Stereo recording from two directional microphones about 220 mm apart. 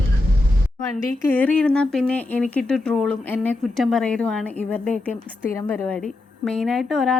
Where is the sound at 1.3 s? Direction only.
5° left (ahead or behind).